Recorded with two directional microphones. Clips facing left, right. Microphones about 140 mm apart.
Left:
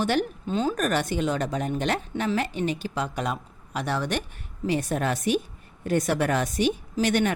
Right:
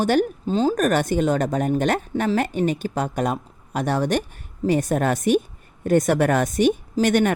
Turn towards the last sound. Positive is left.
turn(degrees=-50)  # may be behind; listen again after turning